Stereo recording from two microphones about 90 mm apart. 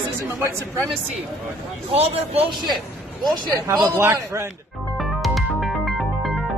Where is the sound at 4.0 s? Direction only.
30° right (ahead or behind).